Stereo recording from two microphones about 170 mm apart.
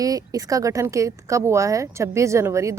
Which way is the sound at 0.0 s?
20° right (ahead or behind).